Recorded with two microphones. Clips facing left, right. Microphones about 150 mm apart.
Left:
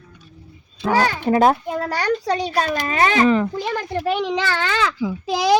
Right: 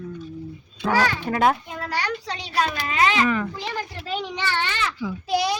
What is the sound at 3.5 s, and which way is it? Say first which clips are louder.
A child's voice: left 7 dB; 55° left (ahead or behind).